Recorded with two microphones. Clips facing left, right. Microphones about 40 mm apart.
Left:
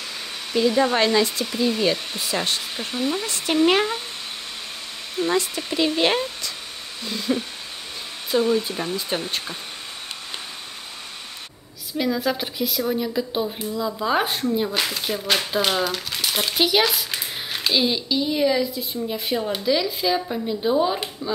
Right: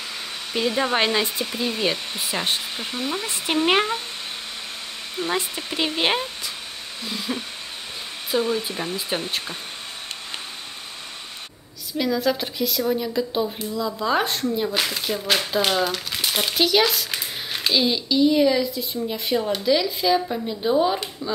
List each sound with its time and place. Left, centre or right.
0.6 s speech: centre
1.4 s speech: centre
2.8 s a child's voice: centre
3.3 s speech: centre
5.2 s a child's voice: centre
12.0 s a woman's voice: centre
16.5 s a child's voice: centre